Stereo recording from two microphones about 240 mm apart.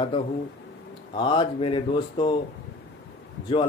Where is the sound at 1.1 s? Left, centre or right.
Centre.